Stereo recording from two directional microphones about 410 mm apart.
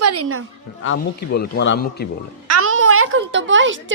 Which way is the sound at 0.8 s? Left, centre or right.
Left.